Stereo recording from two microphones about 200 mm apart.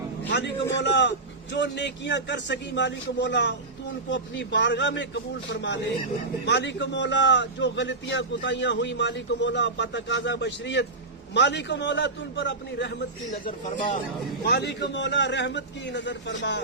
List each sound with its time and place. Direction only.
0.3 s a man's voice: 60° left (ahead or behind)
14.4 s a man's voice: 55° left (ahead or behind)